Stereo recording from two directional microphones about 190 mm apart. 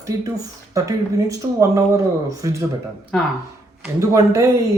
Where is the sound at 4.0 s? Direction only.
15° right (ahead or behind).